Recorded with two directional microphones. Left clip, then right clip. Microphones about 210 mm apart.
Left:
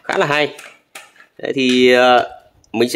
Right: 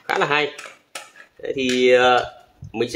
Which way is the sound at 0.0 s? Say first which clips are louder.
Left 3 dB; 50° left (ahead or behind).